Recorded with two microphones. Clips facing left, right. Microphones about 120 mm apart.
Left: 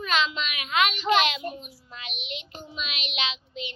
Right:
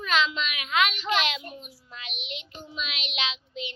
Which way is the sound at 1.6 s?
10° left (ahead or behind).